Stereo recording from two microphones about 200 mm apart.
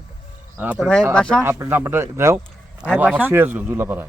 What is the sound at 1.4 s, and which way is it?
Speech, 15° right (ahead or behind).